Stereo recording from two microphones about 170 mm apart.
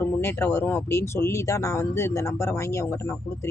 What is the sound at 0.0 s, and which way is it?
Speech, 15° left (ahead or behind).